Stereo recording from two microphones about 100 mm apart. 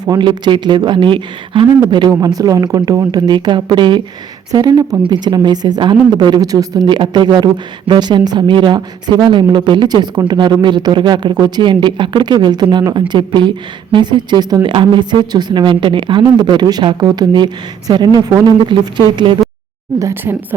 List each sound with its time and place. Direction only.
0.0 s speech: 45° right (ahead or behind)
1.9 s speech: 45° right (ahead or behind)
4.5 s speech: 40° right (ahead or behind)
20.0 s speech: 30° right (ahead or behind)